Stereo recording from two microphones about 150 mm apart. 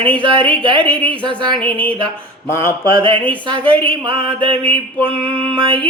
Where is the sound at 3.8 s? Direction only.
35° right (ahead or behind).